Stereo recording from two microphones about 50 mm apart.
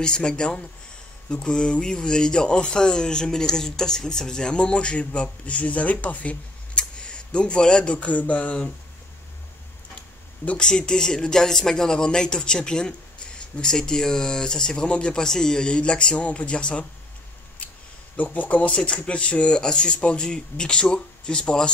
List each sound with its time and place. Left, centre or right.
0.0 s speech: centre
10.4 s speech: left
10.7 s speech: centre
18.1 s speech: left